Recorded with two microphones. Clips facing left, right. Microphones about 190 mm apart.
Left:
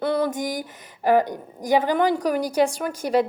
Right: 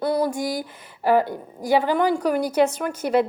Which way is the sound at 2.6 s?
15° left (ahead or behind).